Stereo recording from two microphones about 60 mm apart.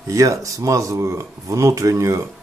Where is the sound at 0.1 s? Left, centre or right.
Right.